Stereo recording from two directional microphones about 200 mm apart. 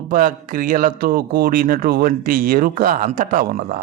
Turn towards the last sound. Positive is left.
turn(degrees=-45)  # may be behind; listen again after turning